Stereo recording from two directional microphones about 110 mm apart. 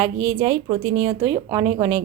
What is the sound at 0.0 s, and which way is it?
Speech, 45° right (ahead or behind).